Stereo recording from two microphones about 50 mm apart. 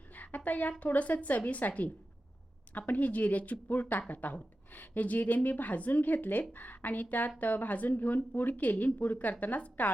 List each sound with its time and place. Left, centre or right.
0.1 s a woman's voice: left